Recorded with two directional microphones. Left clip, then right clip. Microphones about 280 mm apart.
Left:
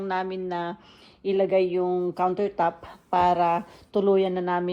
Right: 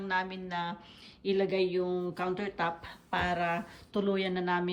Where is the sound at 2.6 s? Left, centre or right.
Centre.